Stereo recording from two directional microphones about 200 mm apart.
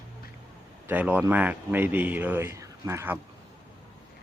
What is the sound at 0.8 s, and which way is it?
Speech, 10° right (ahead or behind).